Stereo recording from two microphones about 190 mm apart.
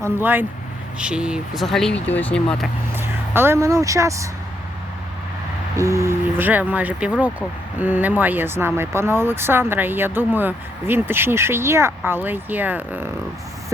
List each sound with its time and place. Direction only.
0.0 s speech: 10° right (ahead or behind)
2.9 s speech: 10° right (ahead or behind)
5.7 s speech: 15° right (ahead or behind)